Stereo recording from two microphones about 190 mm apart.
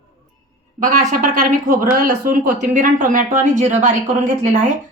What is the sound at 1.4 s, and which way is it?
Speech, 45° right (ahead or behind).